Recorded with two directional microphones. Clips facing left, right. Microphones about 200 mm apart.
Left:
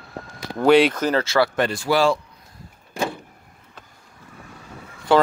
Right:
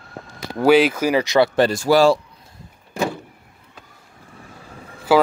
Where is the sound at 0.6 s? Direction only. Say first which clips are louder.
Right 1 dB; 5° right (ahead or behind).